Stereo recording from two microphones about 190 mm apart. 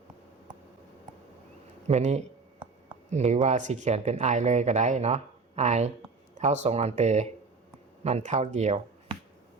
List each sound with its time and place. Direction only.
1.9 s speech: 35° right (ahead or behind)